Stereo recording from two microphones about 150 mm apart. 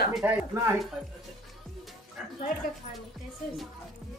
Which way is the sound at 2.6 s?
75° left (ahead or behind).